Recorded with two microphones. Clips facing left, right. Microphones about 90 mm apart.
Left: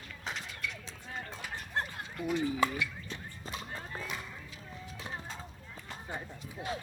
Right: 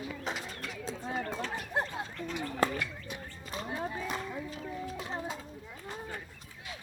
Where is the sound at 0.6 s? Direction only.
40° right (ahead or behind).